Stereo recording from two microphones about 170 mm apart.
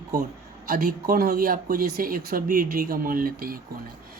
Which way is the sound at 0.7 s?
60° right (ahead or behind).